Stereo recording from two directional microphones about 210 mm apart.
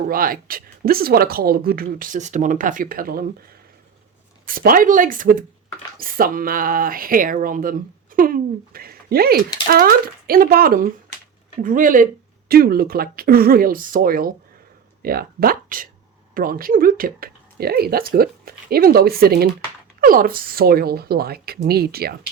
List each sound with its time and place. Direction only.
0.1 s speech: 45° right (ahead or behind)
4.4 s speech: 40° right (ahead or behind)